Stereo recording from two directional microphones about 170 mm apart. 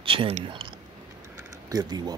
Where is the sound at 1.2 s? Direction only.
20° right (ahead or behind).